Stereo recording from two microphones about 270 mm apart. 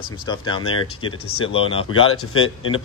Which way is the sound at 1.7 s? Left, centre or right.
Left.